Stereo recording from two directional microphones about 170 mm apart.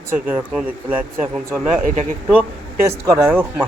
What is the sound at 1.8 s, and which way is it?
Speech, 50° right (ahead or behind).